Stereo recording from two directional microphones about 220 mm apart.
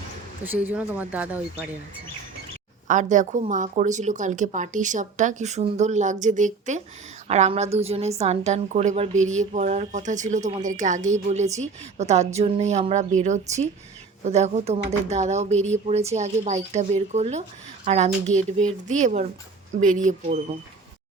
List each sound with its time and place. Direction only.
0.4 s speech: 10° right (ahead or behind)
2.8 s a woman's voice: 35° right (ahead or behind)